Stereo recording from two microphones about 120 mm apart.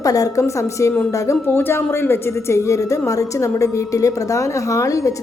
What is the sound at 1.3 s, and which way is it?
A woman's voice, 15° left (ahead or behind).